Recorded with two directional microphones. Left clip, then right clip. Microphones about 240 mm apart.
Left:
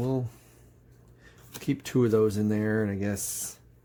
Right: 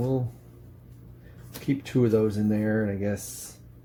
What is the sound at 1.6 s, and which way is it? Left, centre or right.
Speech, left.